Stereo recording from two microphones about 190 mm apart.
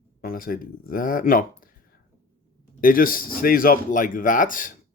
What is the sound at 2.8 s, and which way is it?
A man's voice, 50° left (ahead or behind).